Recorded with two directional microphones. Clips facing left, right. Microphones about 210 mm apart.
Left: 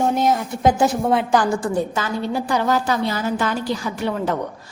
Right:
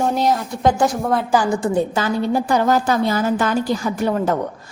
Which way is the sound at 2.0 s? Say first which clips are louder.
Right 4 dB; 30° right (ahead or behind).